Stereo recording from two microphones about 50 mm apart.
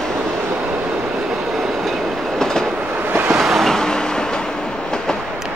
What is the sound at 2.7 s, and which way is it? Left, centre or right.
Train, right.